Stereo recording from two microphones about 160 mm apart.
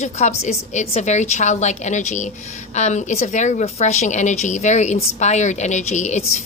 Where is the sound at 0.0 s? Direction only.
45° left (ahead or behind).